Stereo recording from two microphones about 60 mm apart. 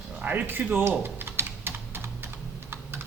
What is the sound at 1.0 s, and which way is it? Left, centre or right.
Typing, right.